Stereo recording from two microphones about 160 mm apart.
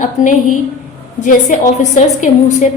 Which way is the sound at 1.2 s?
50° left (ahead or behind).